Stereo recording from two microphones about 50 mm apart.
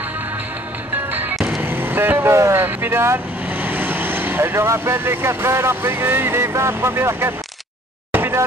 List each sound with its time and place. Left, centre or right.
1.6 s vehicle: right
2.5 s vehicle: right
3.6 s speech: right
8.1 s a sound: right